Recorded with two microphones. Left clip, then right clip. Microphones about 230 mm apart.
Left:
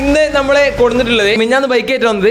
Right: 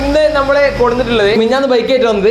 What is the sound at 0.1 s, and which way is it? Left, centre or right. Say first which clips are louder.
A man's voice: even; left.